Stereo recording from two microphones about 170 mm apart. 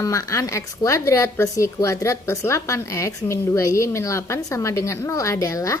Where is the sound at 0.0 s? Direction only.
20° left (ahead or behind).